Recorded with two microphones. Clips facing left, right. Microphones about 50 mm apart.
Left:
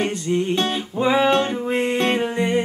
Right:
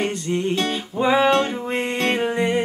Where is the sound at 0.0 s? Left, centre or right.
Centre.